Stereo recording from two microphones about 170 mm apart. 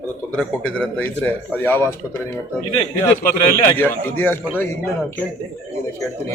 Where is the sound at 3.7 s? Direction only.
10° left (ahead or behind).